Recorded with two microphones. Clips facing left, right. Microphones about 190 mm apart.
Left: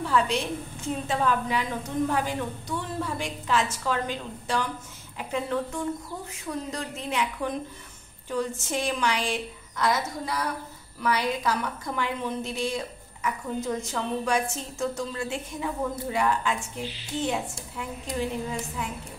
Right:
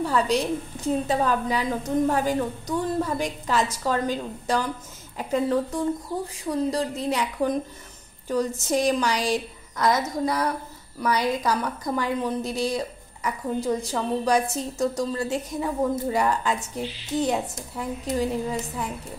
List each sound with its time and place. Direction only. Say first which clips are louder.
0.0 s a woman's voice: right 3 dB; 40° right (ahead or behind)
18.2 s a woman's voice: right 4 dB; 40° right (ahead or behind)